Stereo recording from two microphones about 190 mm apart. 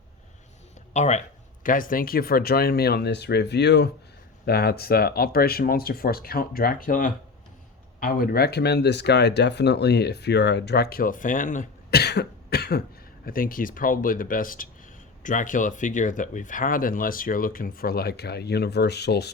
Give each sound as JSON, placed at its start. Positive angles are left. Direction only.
{"t": 0.9, "sound": "speech", "side_deg": 35}